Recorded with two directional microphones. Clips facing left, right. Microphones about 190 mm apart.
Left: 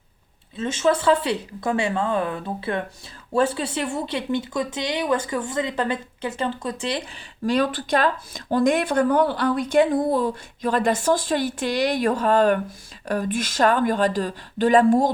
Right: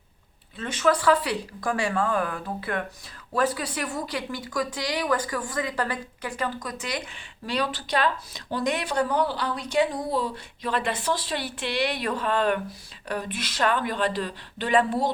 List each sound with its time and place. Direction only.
0.5 s speech: 25° left (ahead or behind)
7.4 s speech: 45° left (ahead or behind)